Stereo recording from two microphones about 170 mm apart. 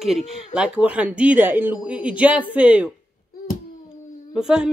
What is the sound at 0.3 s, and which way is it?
Speech, 5° right (ahead or behind).